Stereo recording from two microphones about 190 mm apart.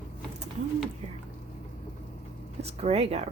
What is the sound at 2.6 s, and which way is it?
Speech, 35° right (ahead or behind).